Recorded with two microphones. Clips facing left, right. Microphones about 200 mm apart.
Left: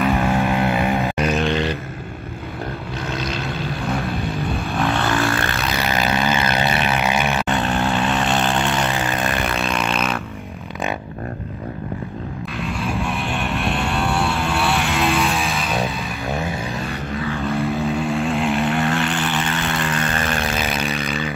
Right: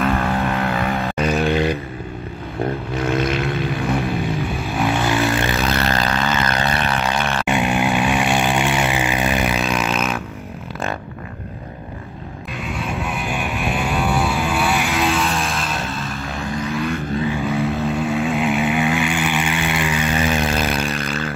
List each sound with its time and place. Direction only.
0.0 s vehicle: centre (ahead or behind)
0.4 s vehicle: 15° left (ahead or behind)
1.3 s a sound: 10° right (ahead or behind)
4.6 s vehicle: 10° right (ahead or behind)
5.6 s a sound: centre (ahead or behind)
5.9 s vehicle: 15° left (ahead or behind)
6.8 s a sound: 15° left (ahead or behind)
7.4 s vehicle: 15° right (ahead or behind)
12.5 s vehicle: centre (ahead or behind)
17.5 s vehicle: centre (ahead or behind)